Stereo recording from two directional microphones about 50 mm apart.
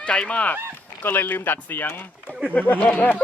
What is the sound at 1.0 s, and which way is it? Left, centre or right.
Speech, left.